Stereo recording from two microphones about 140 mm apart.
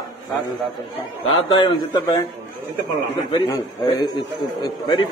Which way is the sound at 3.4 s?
30° left (ahead or behind).